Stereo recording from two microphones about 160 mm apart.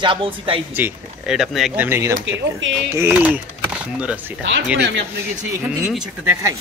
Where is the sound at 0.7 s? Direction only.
10° right (ahead or behind).